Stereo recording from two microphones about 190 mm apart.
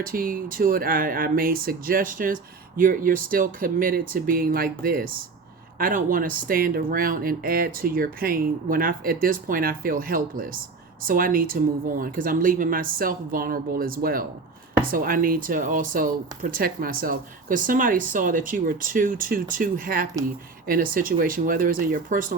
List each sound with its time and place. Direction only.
0.0 s speech: 50° right (ahead or behind)